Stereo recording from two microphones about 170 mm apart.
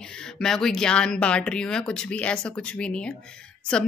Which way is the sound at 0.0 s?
5° left (ahead or behind).